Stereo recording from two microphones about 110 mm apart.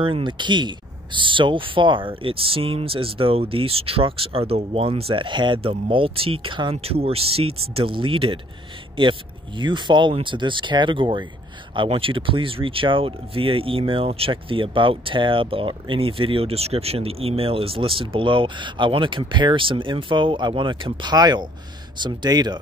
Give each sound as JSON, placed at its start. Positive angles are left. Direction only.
{"t": 0.0, "sound": "speech", "side_deg": -50}
{"t": 6.8, "sound": "speech", "side_deg": -60}